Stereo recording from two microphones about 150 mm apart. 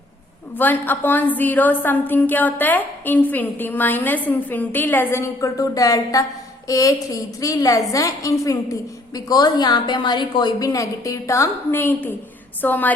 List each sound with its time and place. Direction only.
0.5 s a woman's voice: 10° left (ahead or behind)